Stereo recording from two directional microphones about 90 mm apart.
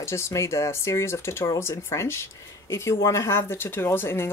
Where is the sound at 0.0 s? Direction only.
30° left (ahead or behind).